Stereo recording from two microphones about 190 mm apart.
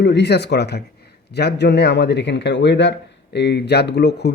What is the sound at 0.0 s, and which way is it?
Speech, 65° left (ahead or behind).